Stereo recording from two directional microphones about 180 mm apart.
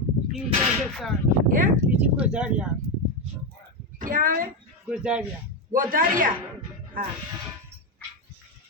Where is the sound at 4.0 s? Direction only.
50° right (ahead or behind).